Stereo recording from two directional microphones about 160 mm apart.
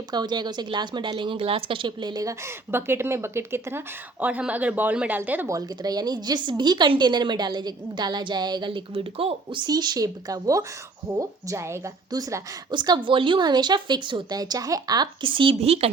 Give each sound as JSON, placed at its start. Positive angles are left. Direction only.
{"t": 0.1, "sound": "a woman's voice", "side_deg": -25}
{"t": 5.5, "sound": "a woman's voice", "side_deg": -25}